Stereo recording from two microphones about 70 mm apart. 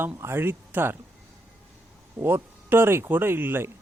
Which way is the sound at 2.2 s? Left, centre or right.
Right.